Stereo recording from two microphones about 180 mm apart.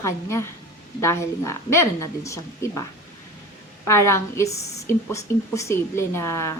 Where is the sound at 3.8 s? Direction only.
15° left (ahead or behind).